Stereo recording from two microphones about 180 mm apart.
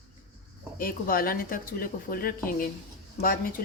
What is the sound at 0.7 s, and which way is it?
Speech, 50° left (ahead or behind).